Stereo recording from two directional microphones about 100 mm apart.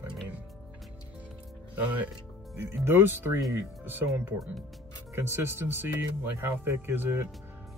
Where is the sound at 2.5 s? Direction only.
25° right (ahead or behind).